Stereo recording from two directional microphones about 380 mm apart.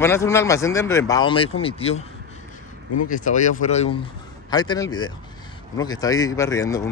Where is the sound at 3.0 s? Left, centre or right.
Centre.